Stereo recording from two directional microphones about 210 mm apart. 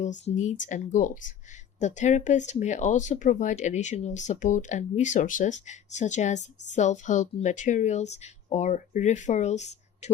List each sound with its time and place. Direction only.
0.0 s speech: 35° left (ahead or behind)